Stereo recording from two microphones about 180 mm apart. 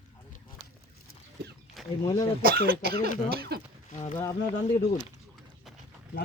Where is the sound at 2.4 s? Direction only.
60° right (ahead or behind).